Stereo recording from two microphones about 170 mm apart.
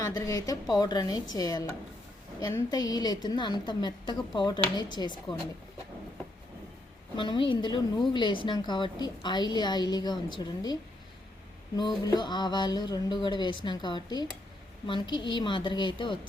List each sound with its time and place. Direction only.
0.0 s a woman's voice: 20° left (ahead or behind)
7.2 s a woman's voice: 30° left (ahead or behind)
11.8 s a woman's voice: 25° left (ahead or behind)